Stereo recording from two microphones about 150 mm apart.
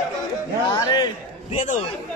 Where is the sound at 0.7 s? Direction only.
25° left (ahead or behind).